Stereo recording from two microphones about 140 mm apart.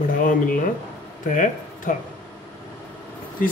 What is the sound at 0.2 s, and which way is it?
Speech, 75° left (ahead or behind).